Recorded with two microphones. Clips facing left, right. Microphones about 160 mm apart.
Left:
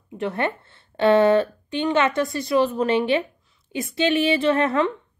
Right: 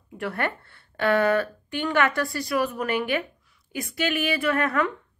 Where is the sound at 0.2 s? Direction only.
20° left (ahead or behind).